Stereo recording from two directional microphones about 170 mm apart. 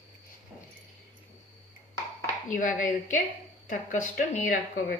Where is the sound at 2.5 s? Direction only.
50° left (ahead or behind).